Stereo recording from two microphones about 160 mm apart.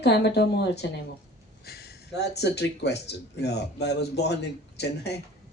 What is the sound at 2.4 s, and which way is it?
Speech, 90° left.